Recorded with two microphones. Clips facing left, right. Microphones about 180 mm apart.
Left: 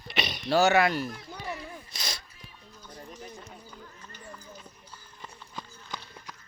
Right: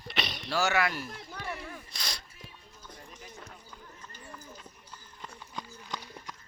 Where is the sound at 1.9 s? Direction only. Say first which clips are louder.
Left 5 dB; 5° left (ahead or behind).